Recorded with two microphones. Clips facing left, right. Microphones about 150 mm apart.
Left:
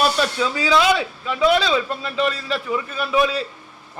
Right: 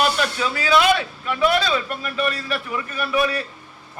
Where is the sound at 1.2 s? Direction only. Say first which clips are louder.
Left 2 dB; 25° left (ahead or behind).